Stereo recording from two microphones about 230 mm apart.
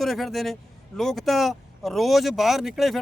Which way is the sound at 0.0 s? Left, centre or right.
Centre.